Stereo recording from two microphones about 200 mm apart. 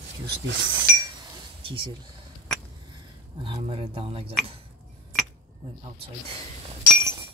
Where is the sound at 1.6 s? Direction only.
25° right (ahead or behind).